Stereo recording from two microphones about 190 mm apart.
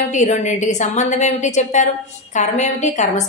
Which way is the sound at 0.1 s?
40° left (ahead or behind).